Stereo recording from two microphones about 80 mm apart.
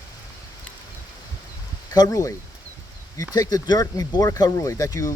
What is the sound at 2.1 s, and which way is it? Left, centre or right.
Speech, left.